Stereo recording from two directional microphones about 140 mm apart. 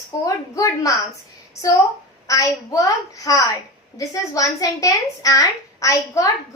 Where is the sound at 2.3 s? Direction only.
25° left (ahead or behind).